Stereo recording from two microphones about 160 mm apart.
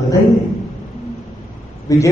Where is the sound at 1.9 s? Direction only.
20° left (ahead or behind).